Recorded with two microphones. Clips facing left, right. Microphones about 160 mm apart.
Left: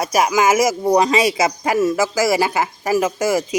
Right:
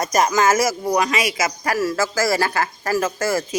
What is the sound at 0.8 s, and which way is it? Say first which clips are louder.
Speech: left 5 dB; 30° left (ahead or behind).